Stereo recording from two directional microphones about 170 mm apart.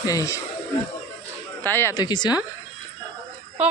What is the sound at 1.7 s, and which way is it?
Speech, 15° left (ahead or behind).